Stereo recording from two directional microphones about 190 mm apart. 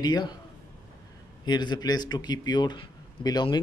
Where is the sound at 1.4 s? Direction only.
25° left (ahead or behind).